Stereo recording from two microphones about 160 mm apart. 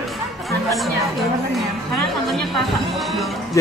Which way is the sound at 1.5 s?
Centre (ahead or behind).